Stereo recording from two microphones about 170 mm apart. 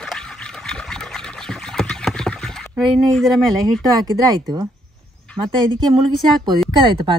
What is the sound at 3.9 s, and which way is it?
Speech, 20° right (ahead or behind).